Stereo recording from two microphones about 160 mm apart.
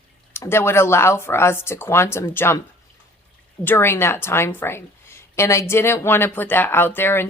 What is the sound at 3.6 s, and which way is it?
A woman's voice, 15° left (ahead or behind).